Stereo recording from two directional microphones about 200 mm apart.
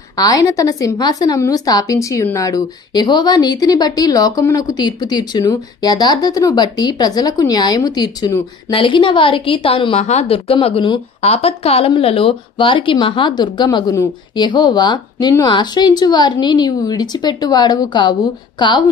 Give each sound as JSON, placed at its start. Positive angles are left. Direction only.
{"t": 0.2, "sound": "a woman's voice", "side_deg": 20}